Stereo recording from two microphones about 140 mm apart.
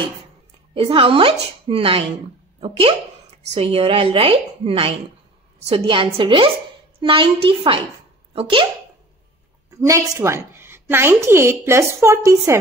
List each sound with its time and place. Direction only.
0.7 s speech: 40° right (ahead or behind)
9.7 s a woman's voice: 25° right (ahead or behind)